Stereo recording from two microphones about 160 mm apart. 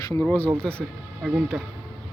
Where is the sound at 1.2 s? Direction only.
5° right (ahead or behind).